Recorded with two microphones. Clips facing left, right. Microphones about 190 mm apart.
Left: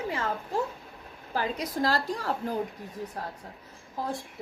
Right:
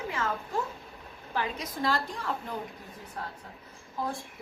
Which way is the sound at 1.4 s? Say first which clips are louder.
Left 3 dB; 35° left (ahead or behind).